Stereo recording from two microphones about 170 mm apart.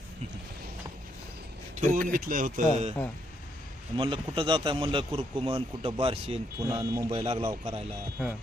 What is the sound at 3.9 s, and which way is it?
A man's voice, 30° right (ahead or behind).